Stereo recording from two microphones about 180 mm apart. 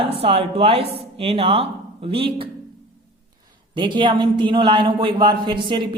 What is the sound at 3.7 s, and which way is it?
A man's voice, 25° right (ahead or behind).